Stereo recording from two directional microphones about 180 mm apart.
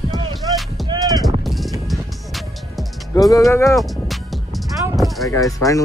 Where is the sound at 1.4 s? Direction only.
Centre (ahead or behind).